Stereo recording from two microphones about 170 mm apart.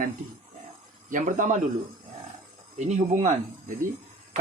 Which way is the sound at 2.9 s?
45° right (ahead or behind).